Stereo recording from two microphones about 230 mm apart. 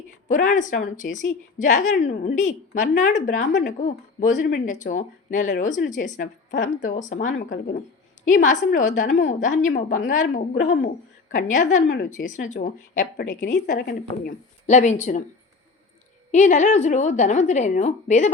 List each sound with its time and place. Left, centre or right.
0.3 s speech: left
10.2 s a woman's voice: left
10.6 s speech: left
16.3 s speech: left